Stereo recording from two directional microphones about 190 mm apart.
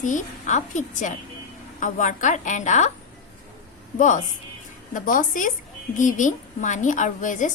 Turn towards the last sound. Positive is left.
turn(degrees=40)  # may be behind; listen again after turning